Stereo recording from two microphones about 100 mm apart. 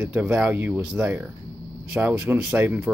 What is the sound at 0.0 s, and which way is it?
Speech, 15° right (ahead or behind).